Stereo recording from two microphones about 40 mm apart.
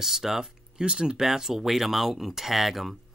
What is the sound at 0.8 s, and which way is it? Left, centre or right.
Speech, right.